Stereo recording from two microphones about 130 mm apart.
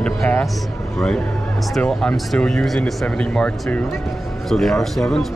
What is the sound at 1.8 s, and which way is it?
Speech, 5° left (ahead or behind).